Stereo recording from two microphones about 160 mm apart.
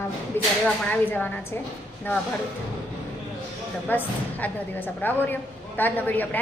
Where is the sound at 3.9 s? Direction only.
10° left (ahead or behind).